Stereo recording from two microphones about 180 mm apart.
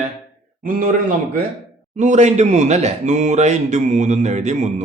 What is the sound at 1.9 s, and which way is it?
A man's voice, 40° right (ahead or behind).